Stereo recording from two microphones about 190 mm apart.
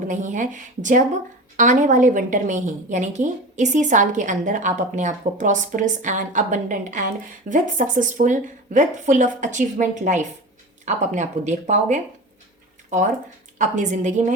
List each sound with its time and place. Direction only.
0.1 s a woman's voice: 40° right (ahead or behind)
13.6 s a woman's voice: 40° right (ahead or behind)